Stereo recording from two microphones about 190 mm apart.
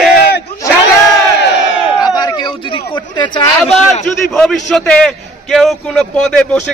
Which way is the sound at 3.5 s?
5° left (ahead or behind).